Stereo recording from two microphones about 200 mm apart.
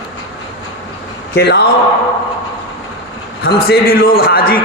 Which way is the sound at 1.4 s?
55° left (ahead or behind).